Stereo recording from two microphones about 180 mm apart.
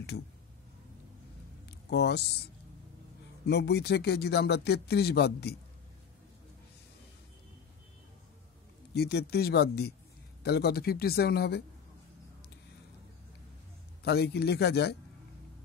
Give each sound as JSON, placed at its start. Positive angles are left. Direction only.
{"t": 1.7, "sound": "a sound", "side_deg": 65}
{"t": 3.4, "sound": "speech", "side_deg": 65}
{"t": 8.9, "sound": "speech", "side_deg": 65}
{"t": 14.0, "sound": "speech", "side_deg": 65}